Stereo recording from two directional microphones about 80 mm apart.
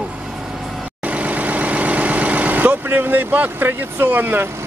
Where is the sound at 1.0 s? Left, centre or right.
Centre.